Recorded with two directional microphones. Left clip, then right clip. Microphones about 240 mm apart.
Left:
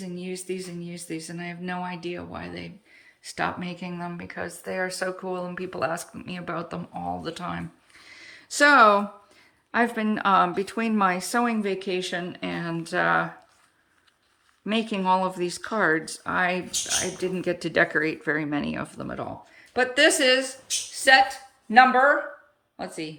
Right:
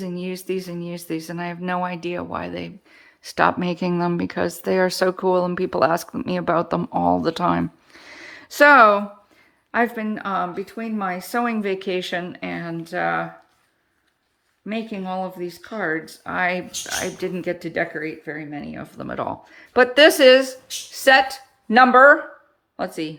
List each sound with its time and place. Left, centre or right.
0.0 s speech: centre
14.6 s speech: centre